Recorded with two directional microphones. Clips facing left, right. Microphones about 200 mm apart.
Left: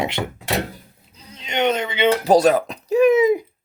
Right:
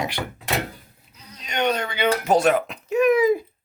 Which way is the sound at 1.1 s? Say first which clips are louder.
Left 4 dB; 25° left (ahead or behind).